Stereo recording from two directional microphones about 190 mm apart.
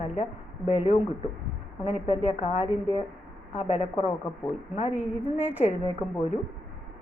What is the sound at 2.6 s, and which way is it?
Speech, 10° right (ahead or behind).